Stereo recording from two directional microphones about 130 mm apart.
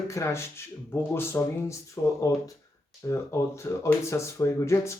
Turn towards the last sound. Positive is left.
turn(degrees=20)  # may be behind; listen again after turning